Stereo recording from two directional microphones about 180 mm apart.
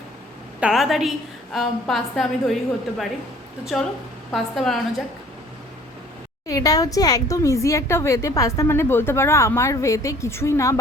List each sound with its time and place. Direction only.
0.6 s a woman's voice: centre (ahead or behind)
3.6 s a woman's voice: centre (ahead or behind)
6.5 s a woman's voice: 20° left (ahead or behind)